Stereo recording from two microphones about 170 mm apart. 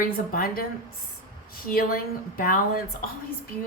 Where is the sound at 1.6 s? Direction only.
60° left (ahead or behind).